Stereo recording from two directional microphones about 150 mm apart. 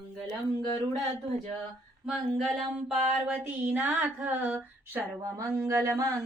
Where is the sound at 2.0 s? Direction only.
Centre (ahead or behind).